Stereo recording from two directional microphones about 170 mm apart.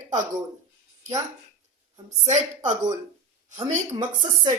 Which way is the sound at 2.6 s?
25° right (ahead or behind).